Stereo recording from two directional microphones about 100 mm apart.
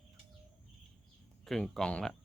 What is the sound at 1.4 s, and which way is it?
Speech, 5° left (ahead or behind).